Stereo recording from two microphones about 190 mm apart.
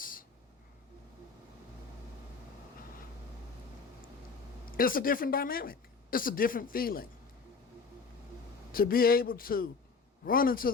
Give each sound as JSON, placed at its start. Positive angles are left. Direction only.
{"t": 0.0, "sound": "a sound", "side_deg": 45}
{"t": 4.8, "sound": "speech", "side_deg": 50}
{"t": 8.7, "sound": "speech", "side_deg": 50}